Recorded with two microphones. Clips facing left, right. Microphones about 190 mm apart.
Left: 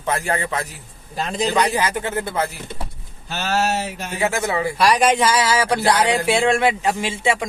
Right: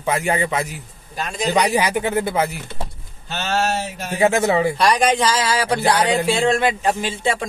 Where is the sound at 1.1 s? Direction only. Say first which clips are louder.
Left 3 dB; 25° left (ahead or behind).